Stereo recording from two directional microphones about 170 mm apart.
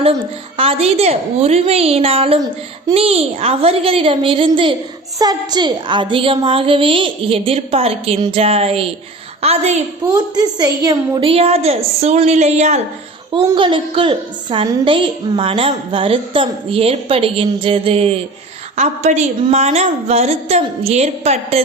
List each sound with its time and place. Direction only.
0.0 s a woman's voice: 35° right (ahead or behind)
10.1 s a woman's voice: 25° right (ahead or behind); by 12.8 s 40° right (ahead or behind)
13.3 s a woman's voice: 30° right (ahead or behind)